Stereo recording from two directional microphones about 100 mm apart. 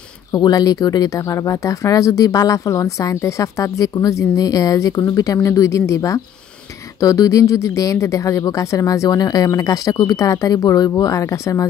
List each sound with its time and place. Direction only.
0.3 s speech: 40° left (ahead or behind)